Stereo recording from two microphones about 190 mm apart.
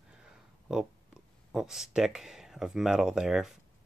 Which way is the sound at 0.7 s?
5° right (ahead or behind).